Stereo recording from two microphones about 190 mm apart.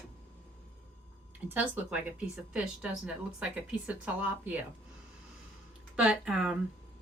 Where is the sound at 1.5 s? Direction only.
10° right (ahead or behind).